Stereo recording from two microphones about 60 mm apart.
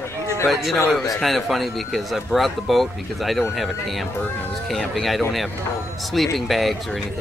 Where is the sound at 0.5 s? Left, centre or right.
Centre.